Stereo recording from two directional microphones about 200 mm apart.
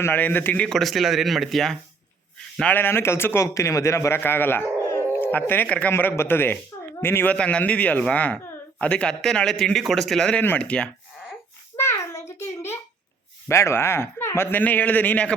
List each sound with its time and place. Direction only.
0.0 s a man's voice: 10° left (ahead or behind)
11.8 s a sound: 15° left (ahead or behind)
13.5 s a man's voice: 15° left (ahead or behind)